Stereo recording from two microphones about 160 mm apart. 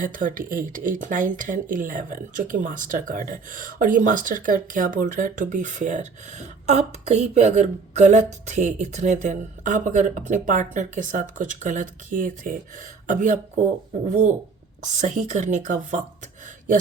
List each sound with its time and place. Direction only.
0.0 s a woman's voice: 55° right (ahead or behind)